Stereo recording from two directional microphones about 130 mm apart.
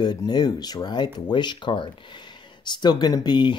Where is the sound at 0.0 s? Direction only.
35° left (ahead or behind).